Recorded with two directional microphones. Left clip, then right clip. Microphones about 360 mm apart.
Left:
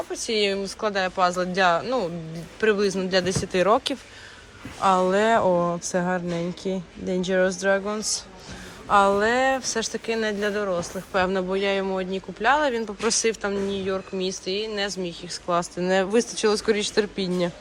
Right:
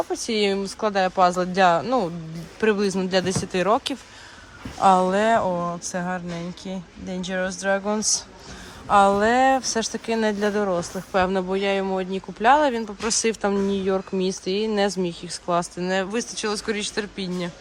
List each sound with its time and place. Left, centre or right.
0.1 s speech: centre